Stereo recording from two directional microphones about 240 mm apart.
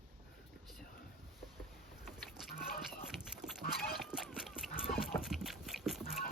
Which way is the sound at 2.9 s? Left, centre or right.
Centre.